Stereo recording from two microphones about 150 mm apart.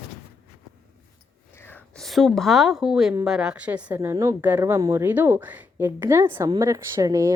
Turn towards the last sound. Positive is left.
turn(degrees=-20)  # may be behind; listen again after turning